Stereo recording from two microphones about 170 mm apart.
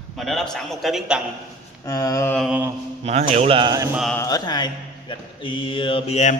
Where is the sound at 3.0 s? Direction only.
40° right (ahead or behind); by 3.9 s 25° right (ahead or behind).